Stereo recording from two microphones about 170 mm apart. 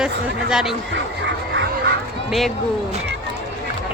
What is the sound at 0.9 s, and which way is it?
Duck, 90° right.